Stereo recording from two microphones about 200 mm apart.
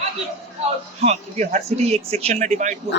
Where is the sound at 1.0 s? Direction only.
35° right (ahead or behind).